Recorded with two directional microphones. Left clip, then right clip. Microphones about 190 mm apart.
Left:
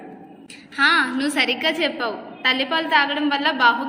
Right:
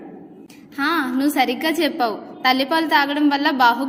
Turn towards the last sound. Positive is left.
turn(degrees=-55)  # may be behind; listen again after turning